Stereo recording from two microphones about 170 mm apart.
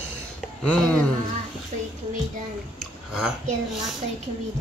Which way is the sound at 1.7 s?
45° right (ahead or behind).